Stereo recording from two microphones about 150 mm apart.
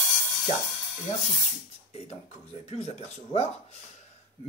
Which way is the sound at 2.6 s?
45° left (ahead or behind).